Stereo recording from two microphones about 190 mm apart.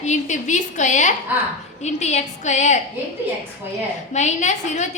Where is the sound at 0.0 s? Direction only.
40° left (ahead or behind).